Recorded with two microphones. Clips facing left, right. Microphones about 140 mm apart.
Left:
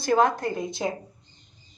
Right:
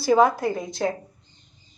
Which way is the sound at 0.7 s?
20° left (ahead or behind).